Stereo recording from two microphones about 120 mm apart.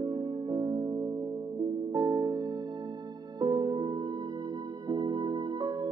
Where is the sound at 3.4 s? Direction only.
35° right (ahead or behind).